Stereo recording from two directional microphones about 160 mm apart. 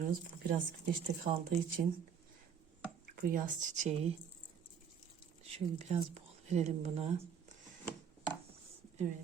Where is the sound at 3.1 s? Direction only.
60° right (ahead or behind); by 4.1 s 40° right (ahead or behind).